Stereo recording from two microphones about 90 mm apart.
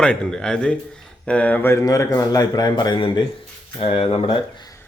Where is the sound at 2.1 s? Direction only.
40° left (ahead or behind); by 3.2 s 55° left (ahead or behind).